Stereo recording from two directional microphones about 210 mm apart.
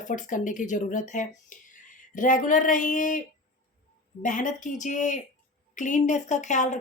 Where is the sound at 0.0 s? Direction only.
35° left (ahead or behind).